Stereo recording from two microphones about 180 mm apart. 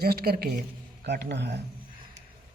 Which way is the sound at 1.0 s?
70° right (ahead or behind).